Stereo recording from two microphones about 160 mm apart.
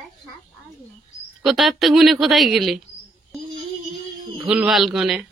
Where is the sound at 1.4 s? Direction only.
Centre (ahead or behind).